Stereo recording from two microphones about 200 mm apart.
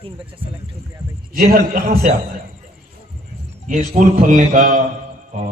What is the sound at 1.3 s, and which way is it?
Speech, 45° right (ahead or behind).